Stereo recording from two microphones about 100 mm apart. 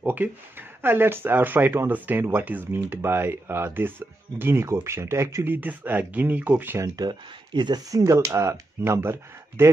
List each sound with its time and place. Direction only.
0.0 s speech: 20° right (ahead or behind)
7.0 s speech: 50° right (ahead or behind)
7.9 s speech: 35° right (ahead or behind)